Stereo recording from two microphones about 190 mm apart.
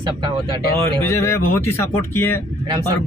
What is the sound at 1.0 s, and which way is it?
A man's voice, 15° left (ahead or behind).